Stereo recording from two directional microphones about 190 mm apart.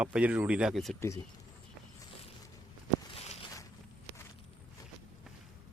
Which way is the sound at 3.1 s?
35° left (ahead or behind).